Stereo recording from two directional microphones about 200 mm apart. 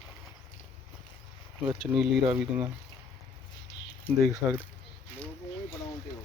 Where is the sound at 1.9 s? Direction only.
5° right (ahead or behind).